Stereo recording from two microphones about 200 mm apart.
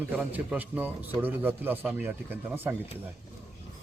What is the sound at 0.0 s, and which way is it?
A man's voice, 10° right (ahead or behind).